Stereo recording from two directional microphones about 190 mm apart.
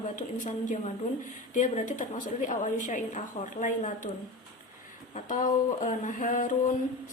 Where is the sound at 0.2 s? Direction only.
40° left (ahead or behind).